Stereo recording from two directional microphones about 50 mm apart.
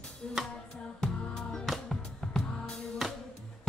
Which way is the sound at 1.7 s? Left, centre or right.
Centre.